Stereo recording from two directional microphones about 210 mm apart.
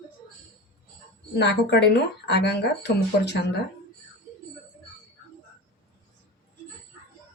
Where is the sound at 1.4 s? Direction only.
55° left (ahead or behind).